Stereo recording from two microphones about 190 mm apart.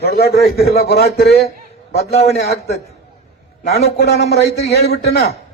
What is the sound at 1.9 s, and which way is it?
Speech, 35° left (ahead or behind).